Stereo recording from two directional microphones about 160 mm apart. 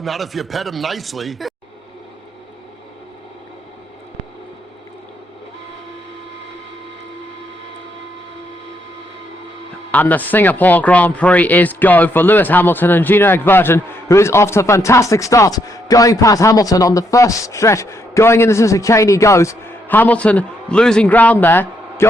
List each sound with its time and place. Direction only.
0.0 s speech: centre (ahead or behind)
9.9 s speech: 10° left (ahead or behind)